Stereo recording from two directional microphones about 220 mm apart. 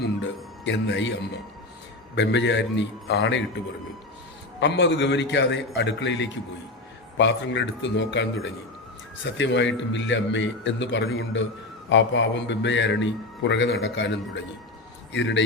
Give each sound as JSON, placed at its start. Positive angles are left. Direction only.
{"t": 0.0, "sound": "music", "side_deg": 55}
{"t": 2.1, "sound": "a man's voice", "side_deg": 55}
{"t": 4.6, "sound": "a man's voice", "side_deg": 55}